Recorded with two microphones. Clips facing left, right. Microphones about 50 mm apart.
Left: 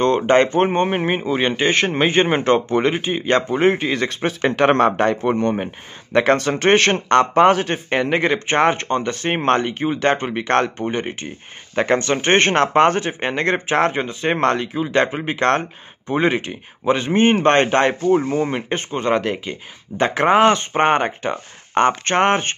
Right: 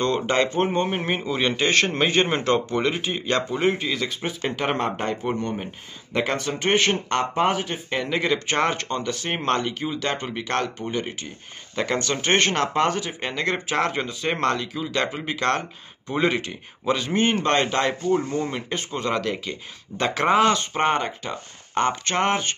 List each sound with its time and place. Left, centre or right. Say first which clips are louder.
0.0 s speech: left 7 dB; left
4.2 s speech: left 9 dB; left